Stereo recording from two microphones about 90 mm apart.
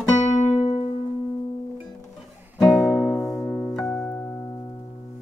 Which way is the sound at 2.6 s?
Centre (ahead or behind).